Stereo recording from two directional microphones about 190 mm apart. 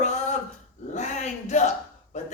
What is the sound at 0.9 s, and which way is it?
A man's voice, 35° left (ahead or behind).